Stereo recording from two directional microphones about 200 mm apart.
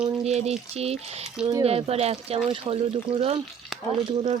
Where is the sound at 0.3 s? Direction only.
30° right (ahead or behind).